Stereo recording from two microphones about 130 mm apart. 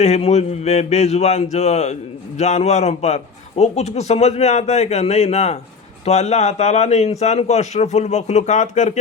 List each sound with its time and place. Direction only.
0.0 s a man's voice: 55° left (ahead or behind)